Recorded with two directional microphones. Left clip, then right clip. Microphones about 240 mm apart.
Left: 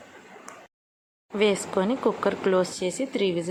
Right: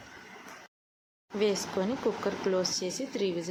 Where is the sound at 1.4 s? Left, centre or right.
Centre.